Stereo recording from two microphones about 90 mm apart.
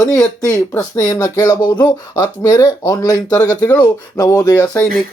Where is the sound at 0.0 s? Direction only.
40° left (ahead or behind).